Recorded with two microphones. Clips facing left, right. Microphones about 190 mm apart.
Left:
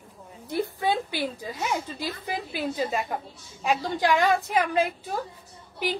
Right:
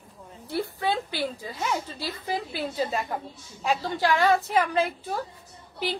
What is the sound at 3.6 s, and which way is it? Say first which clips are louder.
A woman's voice: left 1 dB; 15° left (ahead or behind).